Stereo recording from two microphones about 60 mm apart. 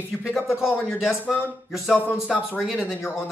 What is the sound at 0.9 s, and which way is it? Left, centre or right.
Speech, centre.